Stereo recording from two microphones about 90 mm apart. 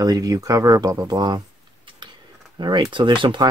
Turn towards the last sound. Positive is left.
turn(degrees=-60)  # may be behind; listen again after turning